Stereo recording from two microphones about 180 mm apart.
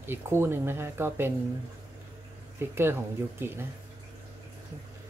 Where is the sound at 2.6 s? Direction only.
15° right (ahead or behind).